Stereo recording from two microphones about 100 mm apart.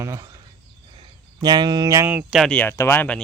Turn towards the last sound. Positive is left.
turn(degrees=25)  # may be behind; listen again after turning